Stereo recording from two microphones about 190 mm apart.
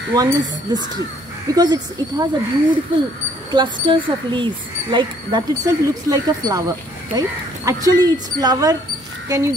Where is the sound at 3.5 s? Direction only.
25° right (ahead or behind).